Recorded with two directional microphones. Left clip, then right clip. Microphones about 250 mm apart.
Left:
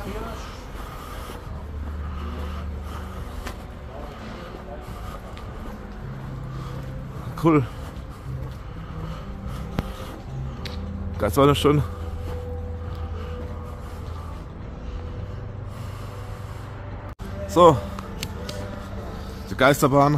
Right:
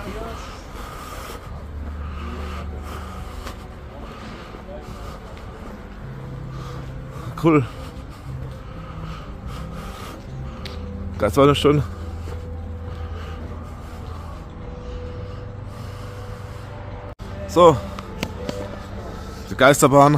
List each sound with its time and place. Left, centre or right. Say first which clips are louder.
7.3 s speech: right 2 dB; centre
11.1 s speech: right 3 dB; centre
17.5 s a sound: right 2 dB; centre
19.5 s a man's voice: right 4 dB; centre